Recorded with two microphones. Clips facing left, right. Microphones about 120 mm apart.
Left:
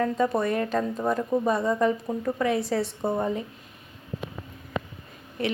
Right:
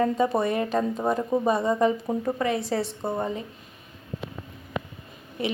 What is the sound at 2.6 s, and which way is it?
Speech, centre (ahead or behind).